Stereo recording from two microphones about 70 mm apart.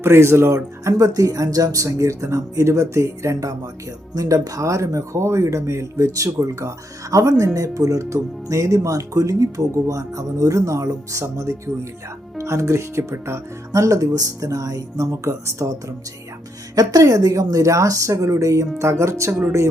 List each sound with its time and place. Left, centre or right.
0.0 s speech: right
4.1 s speech: right
16.7 s speech: right